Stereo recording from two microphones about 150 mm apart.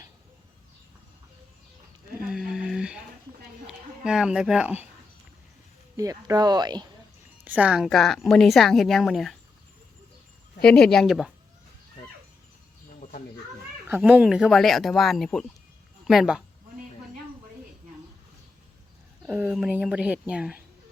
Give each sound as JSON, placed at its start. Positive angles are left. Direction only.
{"t": 2.2, "sound": "a sound", "side_deg": -5}
{"t": 4.0, "sound": "a woman's voice", "side_deg": -5}
{"t": 6.0, "sound": "speech", "side_deg": -25}
{"t": 7.4, "sound": "a woman's voice", "side_deg": -10}
{"t": 10.6, "sound": "a woman's voice", "side_deg": 5}
{"t": 13.0, "sound": "a sound", "side_deg": 60}
{"t": 13.8, "sound": "a woman's voice", "side_deg": -10}
{"t": 19.2, "sound": "speech", "side_deg": -10}